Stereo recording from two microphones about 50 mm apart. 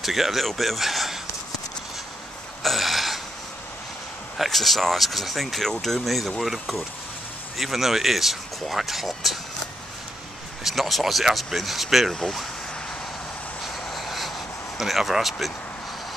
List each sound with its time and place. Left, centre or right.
0.0 s speech: centre
2.6 s a sound: centre
4.4 s speech: centre
7.5 s speech: centre
10.6 s speech: centre
13.8 s vehicle: centre
14.8 s speech: centre